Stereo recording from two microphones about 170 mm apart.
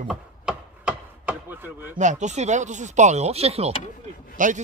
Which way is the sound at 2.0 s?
45° right (ahead or behind).